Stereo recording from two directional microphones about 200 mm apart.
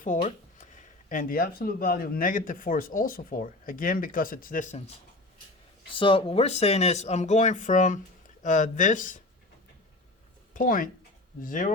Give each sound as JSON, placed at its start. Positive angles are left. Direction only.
{"t": 0.0, "sound": "speech", "side_deg": 40}
{"t": 5.9, "sound": "speech", "side_deg": 25}
{"t": 10.5, "sound": "speech", "side_deg": 40}